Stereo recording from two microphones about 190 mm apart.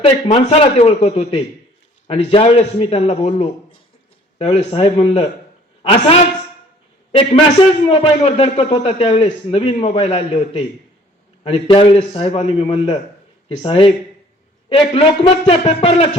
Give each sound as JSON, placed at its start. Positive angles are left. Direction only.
{"t": 0.0, "sound": "a man's voice", "side_deg": 30}